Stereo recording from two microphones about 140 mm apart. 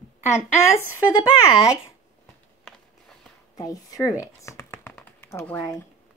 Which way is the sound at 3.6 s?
25° left (ahead or behind).